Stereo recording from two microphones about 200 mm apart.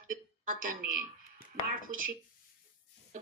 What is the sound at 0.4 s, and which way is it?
Speech, 45° right (ahead or behind).